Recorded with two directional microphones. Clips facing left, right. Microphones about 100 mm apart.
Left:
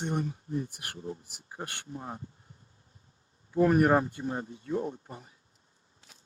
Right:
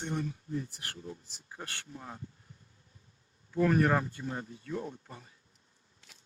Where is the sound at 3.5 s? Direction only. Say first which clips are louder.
Left 4 dB; 25° left (ahead or behind).